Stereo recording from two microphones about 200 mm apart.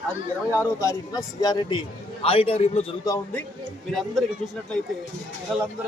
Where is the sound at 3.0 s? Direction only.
10° left (ahead or behind).